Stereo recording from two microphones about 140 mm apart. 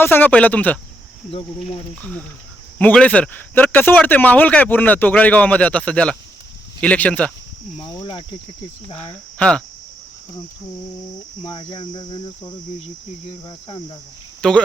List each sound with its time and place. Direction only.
0.0 s speech: 15° left (ahead or behind)
2.0 s speech: 10° left (ahead or behind)
7.8 s cricket: 30° left (ahead or behind)
9.4 s speech: 5° left (ahead or behind)
11.4 s cricket: 35° left (ahead or behind)
14.4 s speech: 5° left (ahead or behind)